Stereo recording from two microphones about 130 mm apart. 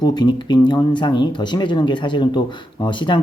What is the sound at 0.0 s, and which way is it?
Speech, 35° left (ahead or behind).